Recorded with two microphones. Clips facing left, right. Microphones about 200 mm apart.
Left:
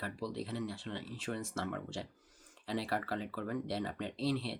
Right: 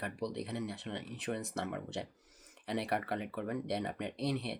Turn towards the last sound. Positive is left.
turn(degrees=-20)  # may be behind; listen again after turning